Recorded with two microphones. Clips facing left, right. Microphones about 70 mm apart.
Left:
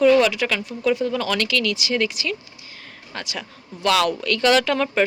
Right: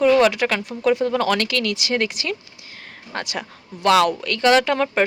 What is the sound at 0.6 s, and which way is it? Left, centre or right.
Speech, right.